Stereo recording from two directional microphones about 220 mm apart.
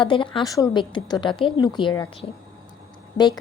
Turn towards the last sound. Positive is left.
turn(degrees=20)  # may be behind; listen again after turning